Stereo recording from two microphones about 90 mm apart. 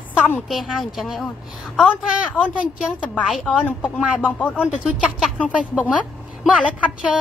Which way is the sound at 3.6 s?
15° left (ahead or behind).